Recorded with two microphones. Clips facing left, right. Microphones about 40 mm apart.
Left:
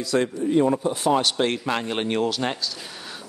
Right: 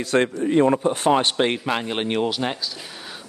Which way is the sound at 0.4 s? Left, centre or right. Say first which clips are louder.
Right 2 dB; right.